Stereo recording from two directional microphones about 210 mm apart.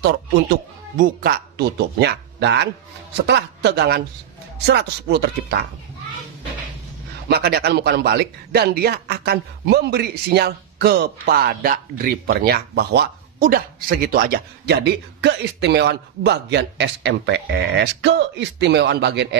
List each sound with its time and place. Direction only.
0.9 s speech: 45° right (ahead or behind)
7.2 s speech: 50° right (ahead or behind)